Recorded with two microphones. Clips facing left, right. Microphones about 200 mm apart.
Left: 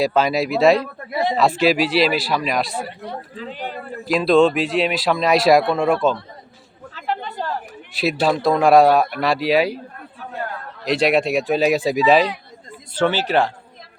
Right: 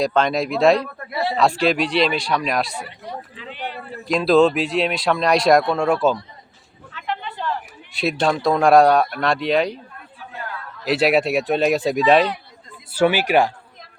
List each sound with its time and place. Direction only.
0.0 s speech: 5° left (ahead or behind)
1.1 s a man's voice: 15° left (ahead or behind)
1.4 s speech: 5° left (ahead or behind)
3.3 s speech: 40° left (ahead or behind)
4.0 s speech: centre (ahead or behind)
6.9 s a sound: 40° left (ahead or behind)
7.9 s speech: centre (ahead or behind)
10.8 s speech: 5° right (ahead or behind)
12.9 s speech: 10° right (ahead or behind)